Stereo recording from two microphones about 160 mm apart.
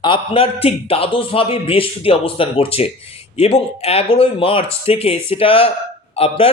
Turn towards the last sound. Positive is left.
turn(degrees=40)  # may be behind; listen again after turning